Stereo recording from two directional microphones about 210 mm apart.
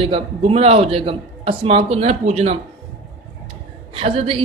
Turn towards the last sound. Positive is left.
turn(degrees=-25)  # may be behind; listen again after turning